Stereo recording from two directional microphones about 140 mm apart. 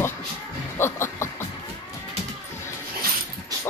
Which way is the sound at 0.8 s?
15° left (ahead or behind).